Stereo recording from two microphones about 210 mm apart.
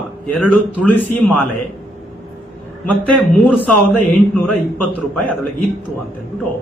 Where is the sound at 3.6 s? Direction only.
5° left (ahead or behind).